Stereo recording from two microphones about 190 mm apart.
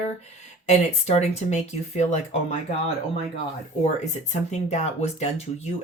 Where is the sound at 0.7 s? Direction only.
35° left (ahead or behind).